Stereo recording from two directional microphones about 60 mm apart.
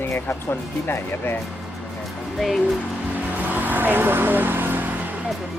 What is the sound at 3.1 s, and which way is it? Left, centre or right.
Vehicle, right.